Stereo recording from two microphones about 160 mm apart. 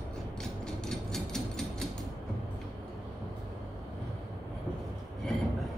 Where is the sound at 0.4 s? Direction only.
5° left (ahead or behind).